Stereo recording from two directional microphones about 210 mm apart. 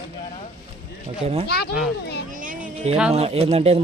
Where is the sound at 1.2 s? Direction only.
30° right (ahead or behind).